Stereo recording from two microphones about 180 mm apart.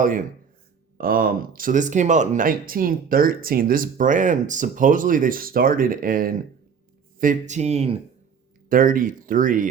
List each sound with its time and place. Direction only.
0.9 s speech: 55° right (ahead or behind); by 7.9 s 35° right (ahead or behind)
8.7 s speech: 50° right (ahead or behind)